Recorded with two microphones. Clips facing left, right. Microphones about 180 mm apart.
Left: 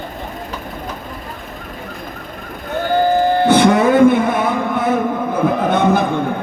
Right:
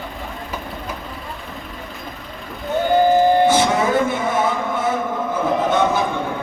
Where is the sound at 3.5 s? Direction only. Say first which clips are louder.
Left 5 dB; 60° left (ahead or behind).